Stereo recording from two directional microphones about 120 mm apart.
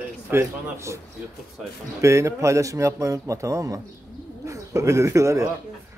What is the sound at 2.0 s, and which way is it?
Speech, 25° right (ahead or behind).